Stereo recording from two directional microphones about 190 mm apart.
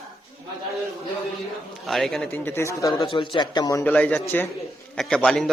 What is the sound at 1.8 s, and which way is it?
Speech, centre (ahead or behind).